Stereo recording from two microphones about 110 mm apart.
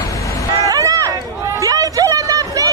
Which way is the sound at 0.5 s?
30° right (ahead or behind).